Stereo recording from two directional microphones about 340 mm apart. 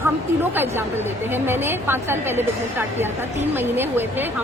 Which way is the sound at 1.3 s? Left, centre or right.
Centre.